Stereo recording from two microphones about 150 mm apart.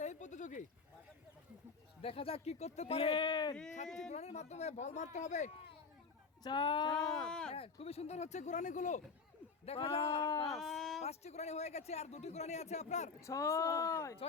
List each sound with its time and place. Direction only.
0.0 s a sound: 55° left (ahead or behind)
2.0 s speech: 40° left (ahead or behind)
3.5 s speech: 5° left (ahead or behind)
4.1 s a man's voice: 45° left (ahead or behind)
6.4 s speech: 30° left (ahead or behind)
6.9 s speech: 5° left (ahead or behind)
7.5 s a man's voice: 40° left (ahead or behind); by 9.0 s 55° left (ahead or behind)
9.6 s speech: 40° left (ahead or behind)
10.2 s speech: 25° left (ahead or behind)
10.5 s speech: centre (ahead or behind)
11.0 s a man's voice: 45° left (ahead or behind)
13.2 s speech: 20° left (ahead or behind)